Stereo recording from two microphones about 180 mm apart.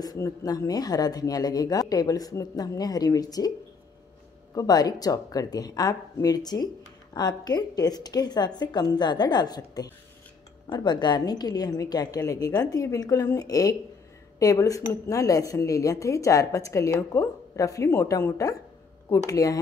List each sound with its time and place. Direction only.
0.0 s speech: 20° left (ahead or behind)
4.6 s speech: 20° left (ahead or behind)